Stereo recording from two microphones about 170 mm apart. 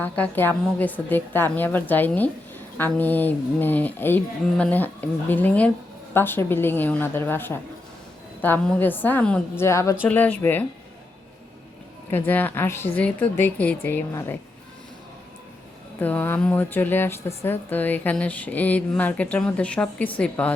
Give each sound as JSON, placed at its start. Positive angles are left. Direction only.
{"t": 0.0, "sound": "speech", "side_deg": 10}
{"t": 12.1, "sound": "speech", "side_deg": 10}
{"t": 16.0, "sound": "speech", "side_deg": 10}